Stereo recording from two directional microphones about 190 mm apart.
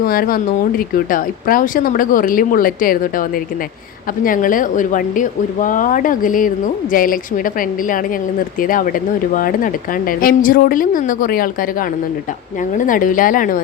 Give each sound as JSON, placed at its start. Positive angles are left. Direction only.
{"t": 0.0, "sound": "speech", "side_deg": 50}
{"t": 12.7, "sound": "speech", "side_deg": 45}